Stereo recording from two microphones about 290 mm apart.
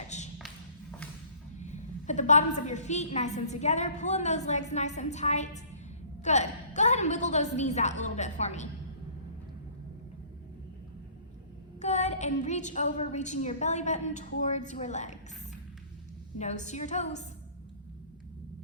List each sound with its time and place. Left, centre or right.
0.3 s a sound: centre
1.5 s a woman's voice: left
11.8 s a woman's voice: left
16.4 s a woman's voice: left